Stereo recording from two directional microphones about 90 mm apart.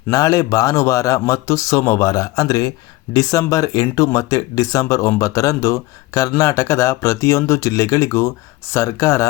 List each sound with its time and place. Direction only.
0.1 s speech: 40° left (ahead or behind)